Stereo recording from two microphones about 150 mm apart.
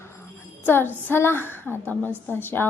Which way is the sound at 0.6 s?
15° left (ahead or behind).